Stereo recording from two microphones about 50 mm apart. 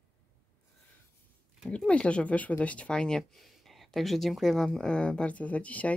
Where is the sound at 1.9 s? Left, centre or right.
Left.